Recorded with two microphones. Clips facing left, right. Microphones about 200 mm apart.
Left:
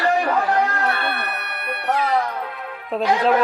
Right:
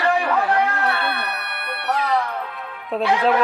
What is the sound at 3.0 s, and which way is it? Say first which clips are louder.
Speech: left 1 dB; 40° left (ahead or behind).